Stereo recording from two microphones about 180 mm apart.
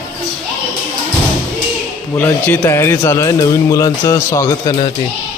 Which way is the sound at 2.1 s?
10° left (ahead or behind).